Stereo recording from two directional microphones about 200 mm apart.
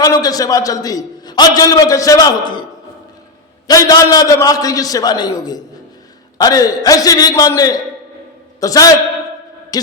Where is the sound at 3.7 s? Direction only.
20° left (ahead or behind).